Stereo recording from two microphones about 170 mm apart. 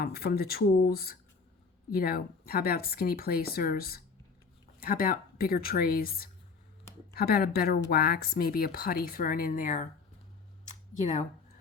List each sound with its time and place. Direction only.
0.0 s speech: 65° left (ahead or behind)
11.0 s speech: 45° left (ahead or behind)